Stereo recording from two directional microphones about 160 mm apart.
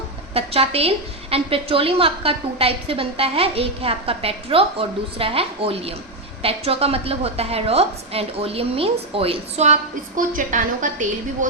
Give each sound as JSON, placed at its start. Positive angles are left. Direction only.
{"t": 0.3, "sound": "a woman's voice", "side_deg": -40}
{"t": 10.2, "sound": "a woman's voice", "side_deg": -55}